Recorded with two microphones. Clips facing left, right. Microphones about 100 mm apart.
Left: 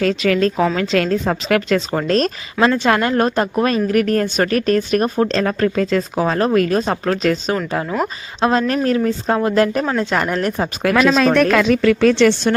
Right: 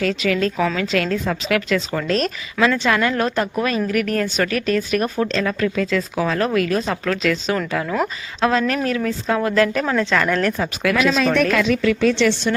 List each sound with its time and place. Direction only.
0.0 s a woman's voice: 40° left (ahead or behind); by 10.7 s 25° left (ahead or behind)
10.9 s a woman's voice: 45° left (ahead or behind)